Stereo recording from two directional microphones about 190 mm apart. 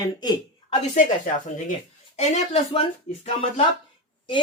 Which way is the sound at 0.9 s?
40° left (ahead or behind).